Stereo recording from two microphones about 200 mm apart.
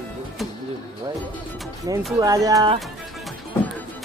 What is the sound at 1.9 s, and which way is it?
Music, 20° right (ahead or behind).